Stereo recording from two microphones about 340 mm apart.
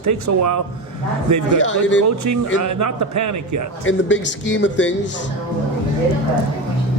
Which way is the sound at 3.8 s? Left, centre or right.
Left.